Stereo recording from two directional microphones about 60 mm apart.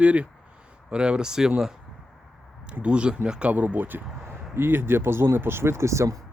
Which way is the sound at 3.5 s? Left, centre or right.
Right.